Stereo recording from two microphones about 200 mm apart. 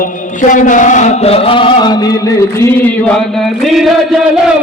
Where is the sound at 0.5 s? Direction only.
40° left (ahead or behind); by 4.2 s centre (ahead or behind).